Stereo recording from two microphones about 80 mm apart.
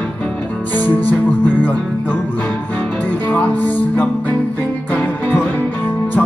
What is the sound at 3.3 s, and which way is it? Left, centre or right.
Music, left.